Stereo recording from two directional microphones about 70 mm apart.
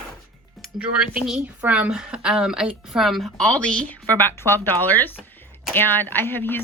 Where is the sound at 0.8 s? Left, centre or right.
Centre.